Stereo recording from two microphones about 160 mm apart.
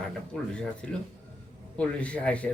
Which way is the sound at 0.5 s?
5° left (ahead or behind).